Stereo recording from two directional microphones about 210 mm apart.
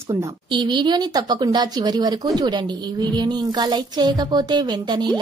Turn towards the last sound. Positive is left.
turn(degrees=-20)  # may be behind; listen again after turning